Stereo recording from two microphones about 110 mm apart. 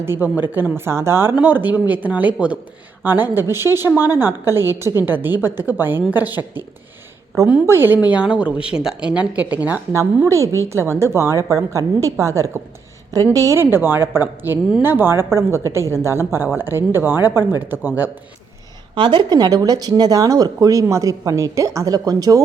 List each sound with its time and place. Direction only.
0.0 s a woman's voice: 20° right (ahead or behind)
7.7 s a woman's voice: 20° right (ahead or behind)
10.2 s a woman's voice: 25° right (ahead or behind)
17.2 s speech: 35° left (ahead or behind)
17.7 s speech: 15° right (ahead or behind)
18.9 s speech: 45° right (ahead or behind)